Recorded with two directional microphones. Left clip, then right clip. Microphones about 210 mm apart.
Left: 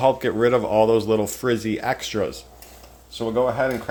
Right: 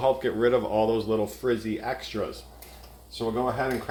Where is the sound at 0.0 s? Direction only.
40° left (ahead or behind).